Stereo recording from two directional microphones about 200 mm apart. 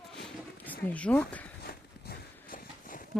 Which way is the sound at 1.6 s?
45° left (ahead or behind).